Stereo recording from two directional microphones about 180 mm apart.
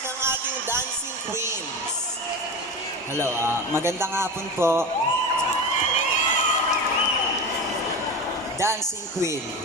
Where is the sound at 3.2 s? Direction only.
15° right (ahead or behind).